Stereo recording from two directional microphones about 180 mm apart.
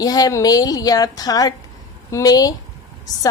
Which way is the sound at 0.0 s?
20° left (ahead or behind).